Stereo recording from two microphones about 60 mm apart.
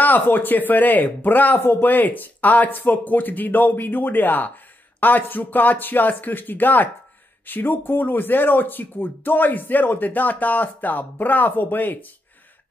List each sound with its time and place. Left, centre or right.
0.0 s speech: left